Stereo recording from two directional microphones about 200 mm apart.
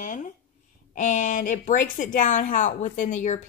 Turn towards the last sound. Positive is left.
turn(degrees=40)  # may be behind; listen again after turning